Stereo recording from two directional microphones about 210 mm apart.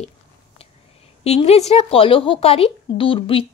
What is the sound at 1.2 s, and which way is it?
A woman's voice, 30° left (ahead or behind).